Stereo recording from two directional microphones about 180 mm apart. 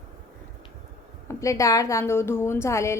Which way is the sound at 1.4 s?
20° left (ahead or behind).